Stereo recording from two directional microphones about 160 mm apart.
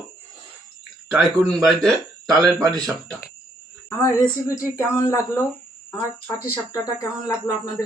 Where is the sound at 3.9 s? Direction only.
15° left (ahead or behind).